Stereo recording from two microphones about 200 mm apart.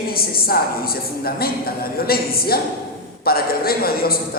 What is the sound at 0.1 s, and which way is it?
Speech, 50° left (ahead or behind).